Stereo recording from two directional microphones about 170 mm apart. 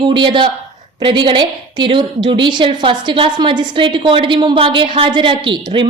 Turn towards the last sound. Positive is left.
turn(degrees=-30)  # may be behind; listen again after turning